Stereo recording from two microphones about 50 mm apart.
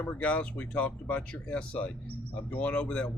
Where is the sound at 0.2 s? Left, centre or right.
Left.